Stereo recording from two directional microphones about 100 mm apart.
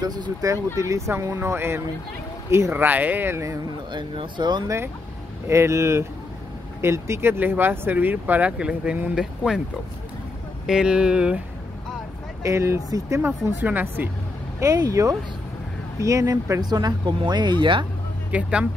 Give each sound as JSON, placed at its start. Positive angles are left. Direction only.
{"t": 0.0, "sound": "speech", "side_deg": -40}
{"t": 3.9, "sound": "speech", "side_deg": -55}
{"t": 4.6, "sound": "speech", "side_deg": -25}
{"t": 10.7, "sound": "speech", "side_deg": -10}
{"t": 12.4, "sound": "speech", "side_deg": -30}
{"t": 13.7, "sound": "speech", "side_deg": -20}
{"t": 14.6, "sound": "speech", "side_deg": -35}
{"t": 16.6, "sound": "speech", "side_deg": -45}
{"t": 18.3, "sound": "speech", "side_deg": -10}